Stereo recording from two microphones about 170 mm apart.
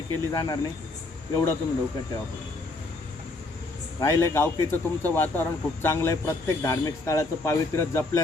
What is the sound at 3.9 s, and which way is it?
Speech, 15° left (ahead or behind).